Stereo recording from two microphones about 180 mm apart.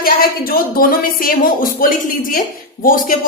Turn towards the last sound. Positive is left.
turn(degrees=50)  # may be behind; listen again after turning